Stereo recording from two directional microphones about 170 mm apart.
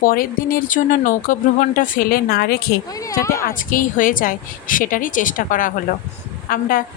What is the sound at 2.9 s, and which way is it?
Speech, 20° left (ahead or behind).